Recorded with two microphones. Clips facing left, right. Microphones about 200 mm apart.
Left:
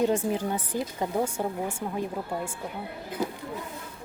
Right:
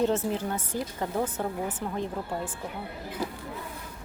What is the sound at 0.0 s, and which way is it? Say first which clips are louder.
A woman's voice: left 1 dB; 10° left (ahead or behind).